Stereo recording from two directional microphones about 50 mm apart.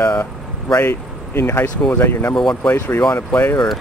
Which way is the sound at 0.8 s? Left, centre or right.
Left.